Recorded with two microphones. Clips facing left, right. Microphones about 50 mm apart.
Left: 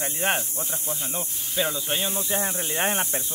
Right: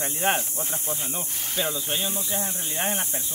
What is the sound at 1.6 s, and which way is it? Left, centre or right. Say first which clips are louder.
Speech: left 2 dB; centre.